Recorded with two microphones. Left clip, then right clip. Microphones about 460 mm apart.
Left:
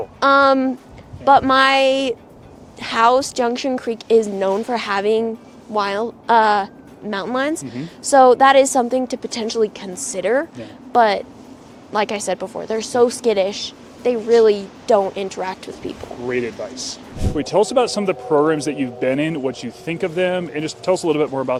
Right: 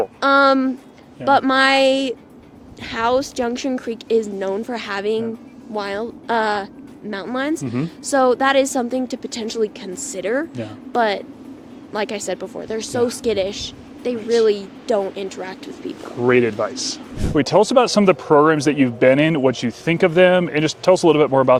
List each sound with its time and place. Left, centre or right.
0.2 s a sound: left
1.2 s a woman's voice: left
16.2 s speech: right